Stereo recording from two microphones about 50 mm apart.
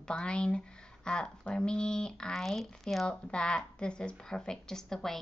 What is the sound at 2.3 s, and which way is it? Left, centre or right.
Speech, centre.